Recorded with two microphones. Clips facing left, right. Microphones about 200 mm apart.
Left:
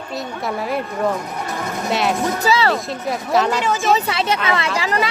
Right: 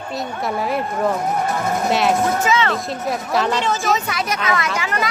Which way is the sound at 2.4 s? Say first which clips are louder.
Left 1 dB; 35° left (ahead or behind).